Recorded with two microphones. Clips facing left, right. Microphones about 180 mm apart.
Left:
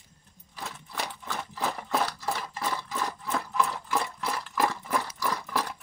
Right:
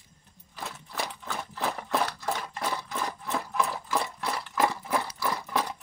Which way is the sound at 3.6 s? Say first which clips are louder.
Even; 5° right (ahead or behind).